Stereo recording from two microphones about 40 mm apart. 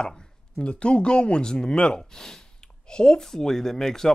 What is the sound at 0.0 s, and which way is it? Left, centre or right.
Speech, left.